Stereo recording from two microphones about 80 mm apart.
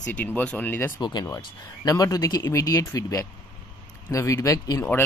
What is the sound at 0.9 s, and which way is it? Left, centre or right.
Speech, left.